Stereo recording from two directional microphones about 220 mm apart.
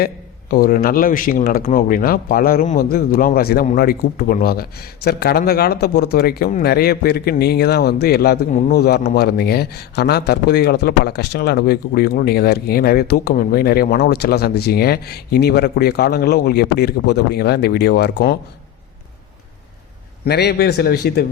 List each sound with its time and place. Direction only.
0.5 s a man's voice: 40° left (ahead or behind)
20.2 s a man's voice: 50° left (ahead or behind)